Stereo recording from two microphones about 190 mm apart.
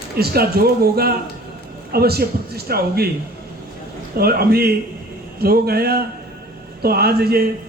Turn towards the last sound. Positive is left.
turn(degrees=-55)  # may be behind; listen again after turning